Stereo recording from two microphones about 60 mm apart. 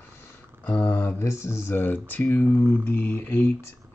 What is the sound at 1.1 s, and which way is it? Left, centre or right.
Speech, left.